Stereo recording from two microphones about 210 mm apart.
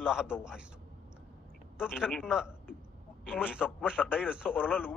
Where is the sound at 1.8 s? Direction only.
5° right (ahead or behind).